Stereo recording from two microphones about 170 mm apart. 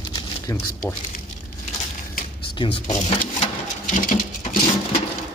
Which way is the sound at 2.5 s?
30° left (ahead or behind).